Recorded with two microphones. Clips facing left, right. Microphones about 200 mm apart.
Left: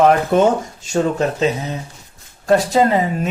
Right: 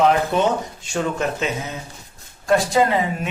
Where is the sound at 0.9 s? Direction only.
35° left (ahead or behind).